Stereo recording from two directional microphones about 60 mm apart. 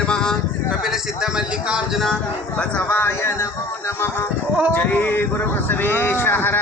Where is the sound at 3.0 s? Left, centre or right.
Left.